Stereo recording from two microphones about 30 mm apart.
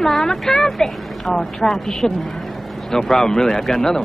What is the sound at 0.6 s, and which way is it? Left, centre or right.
A woman's voice, centre.